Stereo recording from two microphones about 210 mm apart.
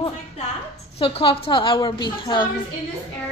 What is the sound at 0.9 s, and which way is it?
A woman's voice, 30° left (ahead or behind).